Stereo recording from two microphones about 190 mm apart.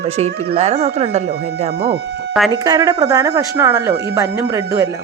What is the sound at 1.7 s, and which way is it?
Speech, 60° right (ahead or behind).